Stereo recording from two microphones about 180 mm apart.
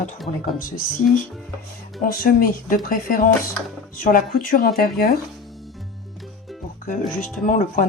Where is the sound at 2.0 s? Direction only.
55° left (ahead or behind).